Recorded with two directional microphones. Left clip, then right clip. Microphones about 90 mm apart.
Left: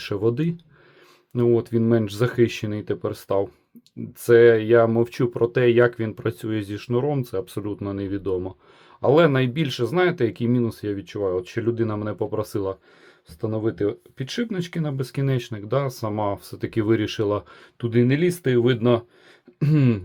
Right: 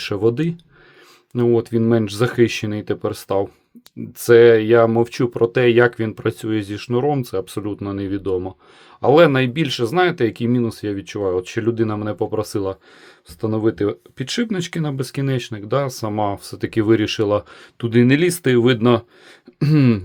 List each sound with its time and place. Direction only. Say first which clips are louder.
0.0 s speech: right 5 dB; 25° right (ahead or behind)
11.0 s speech: right 4 dB; 35° right (ahead or behind)
13.4 s speech: right 5 dB; 40° right (ahead or behind)
17.8 s speech: right 5 dB; 50° right (ahead or behind)
19.5 s a sound: right 5 dB; 40° right (ahead or behind)